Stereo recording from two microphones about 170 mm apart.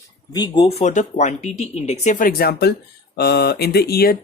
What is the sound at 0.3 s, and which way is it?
Speech, 25° left (ahead or behind).